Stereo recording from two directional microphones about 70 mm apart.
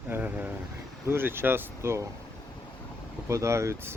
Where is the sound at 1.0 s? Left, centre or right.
Right.